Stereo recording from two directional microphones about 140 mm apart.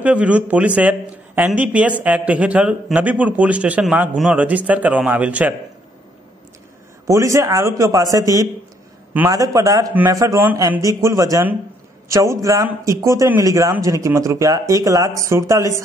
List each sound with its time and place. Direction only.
0.0 s a man's voice: 10° right (ahead or behind)
7.1 s speech: 20° right (ahead or behind)